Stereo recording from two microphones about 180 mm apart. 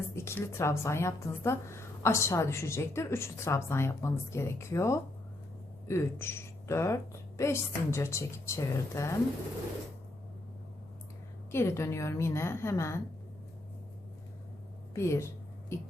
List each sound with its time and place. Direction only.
0.2 s a woman's voice: 15° left (ahead or behind)
11.5 s a woman's voice: 15° left (ahead or behind)
14.9 s a woman's voice: 15° left (ahead or behind)